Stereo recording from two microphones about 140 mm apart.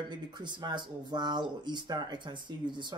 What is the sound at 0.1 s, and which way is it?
Speech, 30° right (ahead or behind).